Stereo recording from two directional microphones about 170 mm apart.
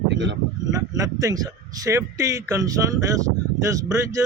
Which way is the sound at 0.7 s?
20° right (ahead or behind).